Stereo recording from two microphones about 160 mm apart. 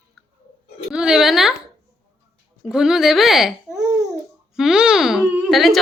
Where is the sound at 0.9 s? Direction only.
5° right (ahead or behind).